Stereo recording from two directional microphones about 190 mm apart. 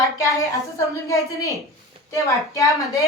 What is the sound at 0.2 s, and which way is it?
A woman's voice, 15° left (ahead or behind).